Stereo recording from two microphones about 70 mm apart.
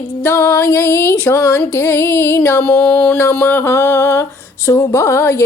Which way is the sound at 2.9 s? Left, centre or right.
Left.